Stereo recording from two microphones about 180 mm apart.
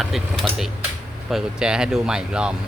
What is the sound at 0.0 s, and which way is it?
A man's voice, centre (ahead or behind).